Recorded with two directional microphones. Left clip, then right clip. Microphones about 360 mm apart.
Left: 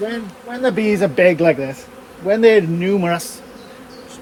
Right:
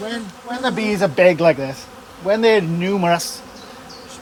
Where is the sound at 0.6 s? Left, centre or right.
Centre.